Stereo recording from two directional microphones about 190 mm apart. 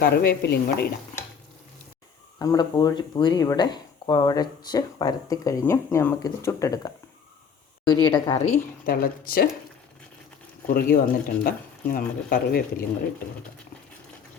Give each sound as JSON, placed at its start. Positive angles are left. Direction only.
{"t": 0.0, "sound": "a woman's voice", "side_deg": 55}
{"t": 2.4, "sound": "speech", "side_deg": 20}
{"t": 8.0, "sound": "speech", "side_deg": 25}
{"t": 8.9, "sound": "speech", "side_deg": 50}
{"t": 10.7, "sound": "speech", "side_deg": 50}